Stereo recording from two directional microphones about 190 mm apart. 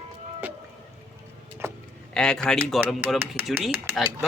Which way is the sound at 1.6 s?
15° right (ahead or behind).